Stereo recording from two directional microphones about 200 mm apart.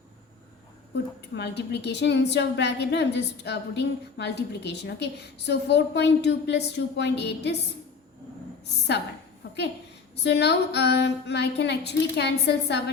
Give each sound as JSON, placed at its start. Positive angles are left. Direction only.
{"t": 0.9, "sound": "a woman's voice", "side_deg": 55}
{"t": 9.4, "sound": "a sound", "side_deg": 60}
{"t": 10.2, "sound": "a woman's voice", "side_deg": 60}